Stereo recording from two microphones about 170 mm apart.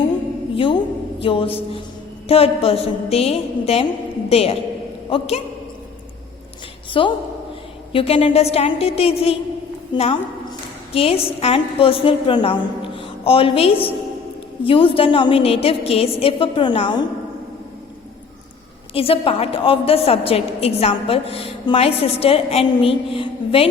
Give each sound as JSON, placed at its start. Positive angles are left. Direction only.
{"t": 0.5, "sound": "a sound", "side_deg": 30}
{"t": 1.2, "sound": "a woman's voice", "side_deg": 30}
{"t": 7.0, "sound": "a woman's voice", "side_deg": 30}
{"t": 18.9, "sound": "a woman's voice", "side_deg": 35}